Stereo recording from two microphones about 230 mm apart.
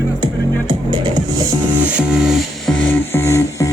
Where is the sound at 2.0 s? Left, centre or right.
Centre.